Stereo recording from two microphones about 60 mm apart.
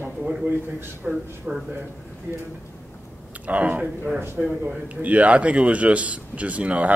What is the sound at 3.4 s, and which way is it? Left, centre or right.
A man's voice, right.